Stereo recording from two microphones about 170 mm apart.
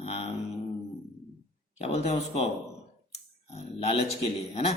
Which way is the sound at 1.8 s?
40° left (ahead or behind).